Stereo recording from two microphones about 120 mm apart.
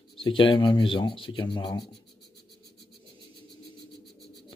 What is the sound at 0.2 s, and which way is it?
Speech, 45° left (ahead or behind).